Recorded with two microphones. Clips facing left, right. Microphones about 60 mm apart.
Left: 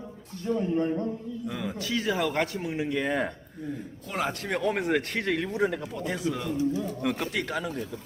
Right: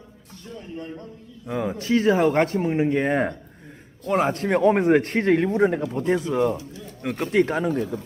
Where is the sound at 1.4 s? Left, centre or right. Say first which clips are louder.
Right 9 dB; right.